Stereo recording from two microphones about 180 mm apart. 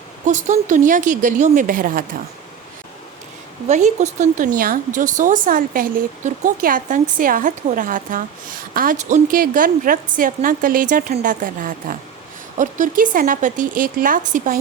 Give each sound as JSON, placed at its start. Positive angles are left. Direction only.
{"t": 0.3, "sound": "a woman's voice", "side_deg": -45}
{"t": 3.7, "sound": "a woman's voice", "side_deg": -40}